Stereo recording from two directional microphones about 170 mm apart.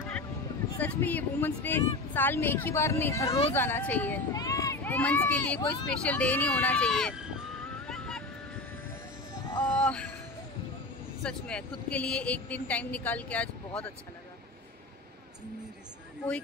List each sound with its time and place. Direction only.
0.7 s speech: 10° left (ahead or behind)
3.3 s speech: 35° left (ahead or behind)
3.5 s speech: 10° left (ahead or behind)
7.9 s vehicle: 5° left (ahead or behind)
9.5 s a sound: 10° left (ahead or behind)
11.2 s speech: 5° left (ahead or behind)